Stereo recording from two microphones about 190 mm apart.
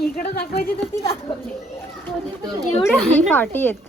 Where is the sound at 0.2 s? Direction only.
50° left (ahead or behind).